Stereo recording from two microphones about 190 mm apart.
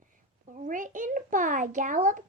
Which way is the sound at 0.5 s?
45° right (ahead or behind).